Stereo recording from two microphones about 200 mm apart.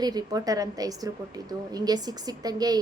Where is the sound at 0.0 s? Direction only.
20° right (ahead or behind).